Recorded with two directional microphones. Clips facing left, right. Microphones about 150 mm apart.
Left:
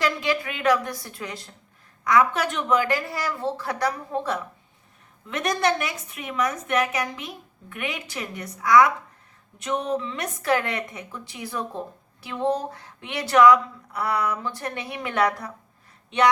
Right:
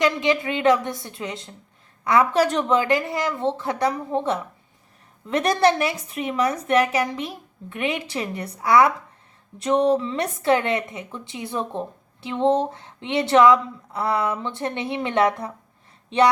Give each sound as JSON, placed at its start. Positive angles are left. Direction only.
{"t": 0.0, "sound": "a woman's voice", "side_deg": -20}
{"t": 5.3, "sound": "a woman's voice", "side_deg": -35}